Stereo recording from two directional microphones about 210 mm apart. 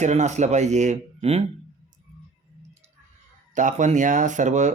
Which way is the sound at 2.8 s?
30° right (ahead or behind).